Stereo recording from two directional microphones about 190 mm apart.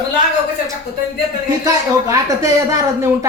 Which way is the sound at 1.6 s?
15° right (ahead or behind).